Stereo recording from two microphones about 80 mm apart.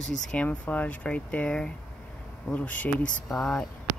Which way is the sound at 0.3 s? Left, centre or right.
Centre.